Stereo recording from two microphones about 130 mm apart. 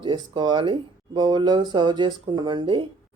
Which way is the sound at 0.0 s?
35° right (ahead or behind).